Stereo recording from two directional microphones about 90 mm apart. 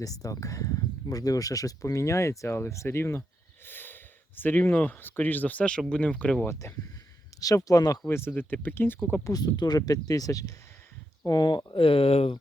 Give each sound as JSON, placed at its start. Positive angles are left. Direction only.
{"t": 0.0, "sound": "speech", "side_deg": 40}
{"t": 6.5, "sound": "speech", "side_deg": 30}
{"t": 7.3, "sound": "speech", "side_deg": 40}
{"t": 8.0, "sound": "speech", "side_deg": 25}
{"t": 9.2, "sound": "speech", "side_deg": 45}
{"t": 11.3, "sound": "speech", "side_deg": 55}